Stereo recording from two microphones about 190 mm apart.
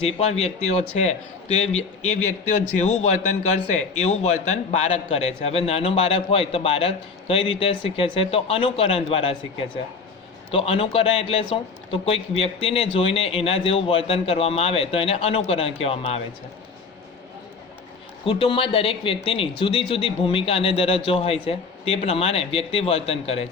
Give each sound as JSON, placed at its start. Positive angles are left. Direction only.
{"t": 0.0, "sound": "a man's voice", "side_deg": 35}
{"t": 10.5, "sound": "a man's voice", "side_deg": 30}
{"t": 18.3, "sound": "speech", "side_deg": 30}